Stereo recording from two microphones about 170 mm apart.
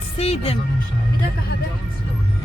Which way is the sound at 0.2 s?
35° left (ahead or behind).